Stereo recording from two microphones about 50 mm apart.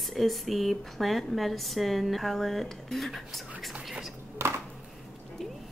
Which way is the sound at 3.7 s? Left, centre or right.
Centre.